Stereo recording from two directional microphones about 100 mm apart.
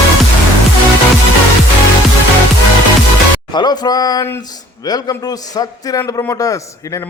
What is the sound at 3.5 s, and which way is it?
A man's voice, 45° left (ahead or behind).